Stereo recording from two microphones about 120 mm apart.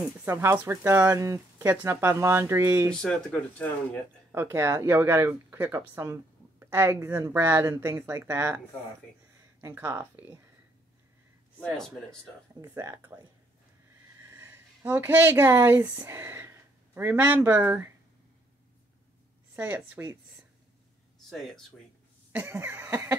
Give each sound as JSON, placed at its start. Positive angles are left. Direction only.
{"t": 0.2, "sound": "speech", "side_deg": -20}
{"t": 2.9, "sound": "speech", "side_deg": 5}
{"t": 4.3, "sound": "speech", "side_deg": -20}
{"t": 9.6, "sound": "speech", "side_deg": -25}
{"t": 11.6, "sound": "speech", "side_deg": 5}
{"t": 12.6, "sound": "speech", "side_deg": -25}
{"t": 14.2, "sound": "speech", "side_deg": -20}
{"t": 19.5, "sound": "speech", "side_deg": -15}
{"t": 21.3, "sound": "speech", "side_deg": 0}
{"t": 22.3, "sound": "speech", "side_deg": -15}